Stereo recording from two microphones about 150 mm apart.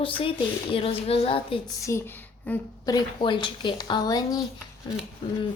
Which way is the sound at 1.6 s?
20° left (ahead or behind).